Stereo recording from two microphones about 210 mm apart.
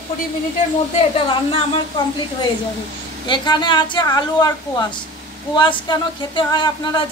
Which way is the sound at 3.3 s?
20° left (ahead or behind).